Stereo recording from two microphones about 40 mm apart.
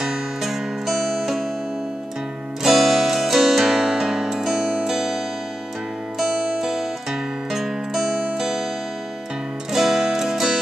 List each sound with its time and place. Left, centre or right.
0.0 s music: centre
2.6 s music: centre
9.7 s music: centre